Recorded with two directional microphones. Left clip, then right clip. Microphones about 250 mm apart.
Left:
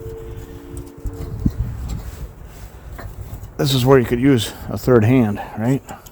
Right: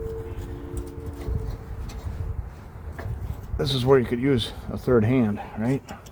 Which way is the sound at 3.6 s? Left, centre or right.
Left.